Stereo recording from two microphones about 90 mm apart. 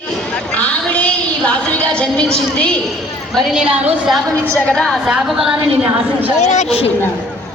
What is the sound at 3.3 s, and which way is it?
A woman's voice, centre (ahead or behind).